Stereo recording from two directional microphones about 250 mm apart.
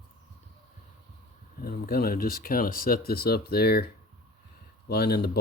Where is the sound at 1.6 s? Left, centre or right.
Left.